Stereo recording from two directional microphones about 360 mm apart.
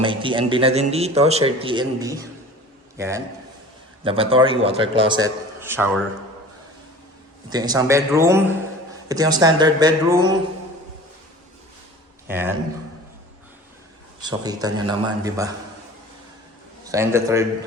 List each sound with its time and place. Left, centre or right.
0.0 s a man's voice: centre
7.5 s a man's voice: centre
12.3 s a man's voice: centre
14.2 s a man's voice: centre
16.8 s a man's voice: centre